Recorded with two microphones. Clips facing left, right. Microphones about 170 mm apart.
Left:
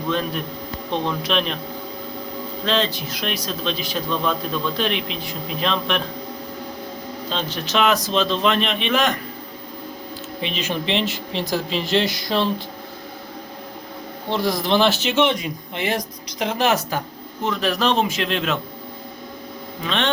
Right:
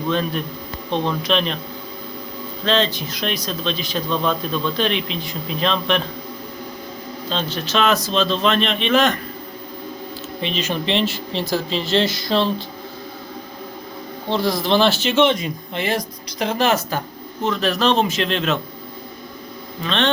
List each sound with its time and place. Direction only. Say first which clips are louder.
1.2 s speech: right 2 dB; 5° left (ahead or behind)
2.6 s a man's voice: right 3 dB; 5° left (ahead or behind)
7.3 s a man's voice: right 2 dB; 15° left (ahead or behind)
10.4 s a man's voice: right 2 dB; 10° left (ahead or behind)
14.4 s a man's voice: right 1 dB; 15° left (ahead or behind)
19.8 s a man's voice: right 2 dB; 10° left (ahead or behind)